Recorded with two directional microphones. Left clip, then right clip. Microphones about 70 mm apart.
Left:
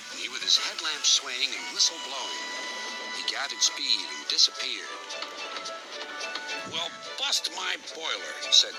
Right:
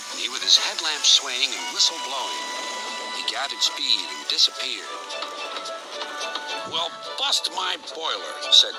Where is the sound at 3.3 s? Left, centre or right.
Right.